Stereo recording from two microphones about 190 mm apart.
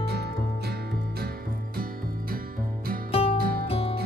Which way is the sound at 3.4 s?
50° right (ahead or behind).